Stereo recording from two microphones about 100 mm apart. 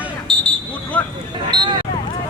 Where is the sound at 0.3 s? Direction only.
5° left (ahead or behind).